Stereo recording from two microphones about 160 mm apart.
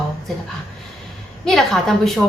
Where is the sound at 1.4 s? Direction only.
Centre (ahead or behind).